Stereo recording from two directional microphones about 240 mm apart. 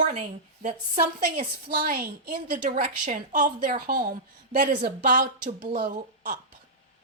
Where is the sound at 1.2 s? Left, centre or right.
Right.